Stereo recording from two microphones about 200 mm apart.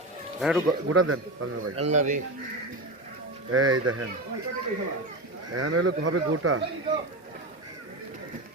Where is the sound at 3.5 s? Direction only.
90° right.